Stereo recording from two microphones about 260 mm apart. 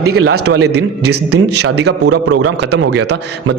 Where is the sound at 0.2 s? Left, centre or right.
Right.